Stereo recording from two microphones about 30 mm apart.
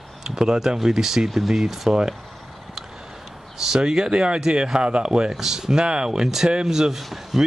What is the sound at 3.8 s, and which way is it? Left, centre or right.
Speech, right.